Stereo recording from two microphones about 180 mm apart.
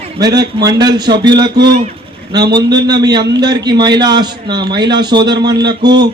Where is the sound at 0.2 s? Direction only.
20° right (ahead or behind).